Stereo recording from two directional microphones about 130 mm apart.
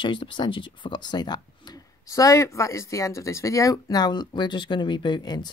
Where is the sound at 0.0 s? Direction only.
40° left (ahead or behind).